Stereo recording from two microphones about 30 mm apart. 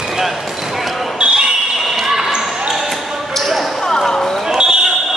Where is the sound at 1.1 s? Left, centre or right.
Right.